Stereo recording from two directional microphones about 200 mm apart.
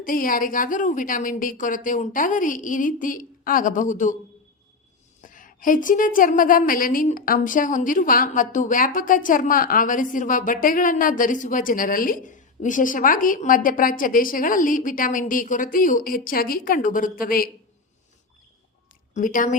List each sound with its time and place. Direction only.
0.0 s a woman's voice: 45° left (ahead or behind)
5.2 s a woman's voice: 40° left (ahead or behind)
19.1 s a woman's voice: 40° left (ahead or behind)